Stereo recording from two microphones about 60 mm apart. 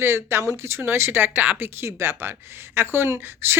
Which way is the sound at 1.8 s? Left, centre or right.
Right.